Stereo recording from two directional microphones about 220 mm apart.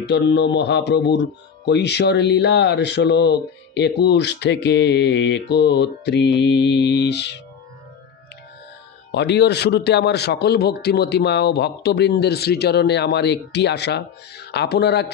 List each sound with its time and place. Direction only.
0.0 s a man's voice: 50° left (ahead or behind)
9.1 s a man's voice: 50° left (ahead or behind)